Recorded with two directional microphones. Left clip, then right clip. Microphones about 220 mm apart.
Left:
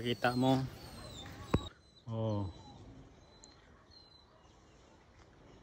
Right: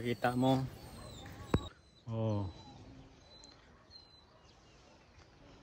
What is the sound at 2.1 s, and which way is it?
Speech, 15° right (ahead or behind).